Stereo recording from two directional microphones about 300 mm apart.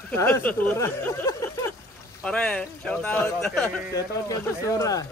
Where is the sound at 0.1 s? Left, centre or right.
Centre.